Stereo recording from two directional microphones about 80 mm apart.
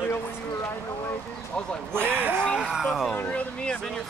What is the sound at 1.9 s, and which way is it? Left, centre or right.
Speech, right.